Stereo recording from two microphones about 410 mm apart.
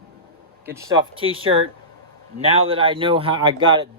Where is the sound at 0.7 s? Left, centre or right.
Centre.